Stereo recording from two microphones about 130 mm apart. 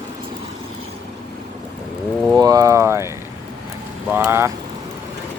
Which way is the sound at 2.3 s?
30° right (ahead or behind).